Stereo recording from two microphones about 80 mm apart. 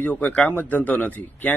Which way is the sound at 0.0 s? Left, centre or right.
Left.